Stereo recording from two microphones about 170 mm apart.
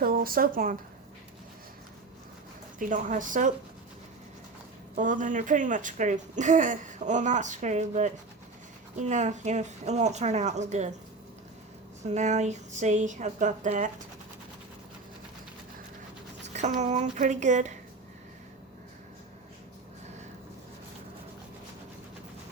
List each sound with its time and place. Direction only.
0.0 s speech: 60° right (ahead or behind)
2.7 s speech: 50° right (ahead or behind)
4.9 s speech: 50° right (ahead or behind)
12.1 s speech: 45° right (ahead or behind)
16.5 s speech: 45° right (ahead or behind)